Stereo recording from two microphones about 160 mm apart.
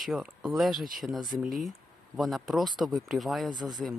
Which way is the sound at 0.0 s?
Centre (ahead or behind).